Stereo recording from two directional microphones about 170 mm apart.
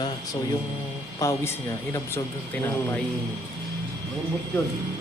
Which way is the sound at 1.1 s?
15° left (ahead or behind).